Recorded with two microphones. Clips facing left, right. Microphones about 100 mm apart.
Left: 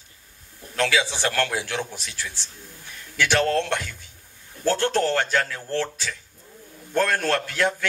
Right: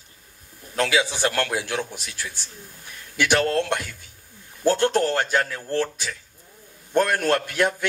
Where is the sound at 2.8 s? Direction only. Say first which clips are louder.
Right 2 dB; 15° right (ahead or behind).